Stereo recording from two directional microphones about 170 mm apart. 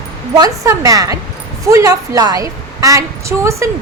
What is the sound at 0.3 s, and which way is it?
A woman's voice, 20° right (ahead or behind).